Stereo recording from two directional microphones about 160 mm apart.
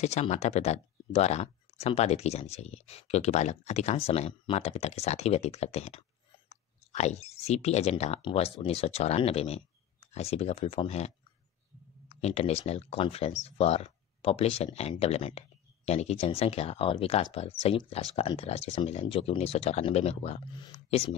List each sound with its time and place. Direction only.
0.0 s speech: 45° left (ahead or behind)
12.1 s speech: 40° left (ahead or behind)